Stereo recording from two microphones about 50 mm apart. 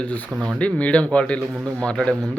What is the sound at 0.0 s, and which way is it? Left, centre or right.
Speech, left.